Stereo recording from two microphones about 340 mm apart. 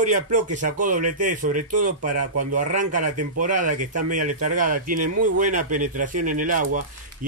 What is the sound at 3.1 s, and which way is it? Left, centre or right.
Speech, right.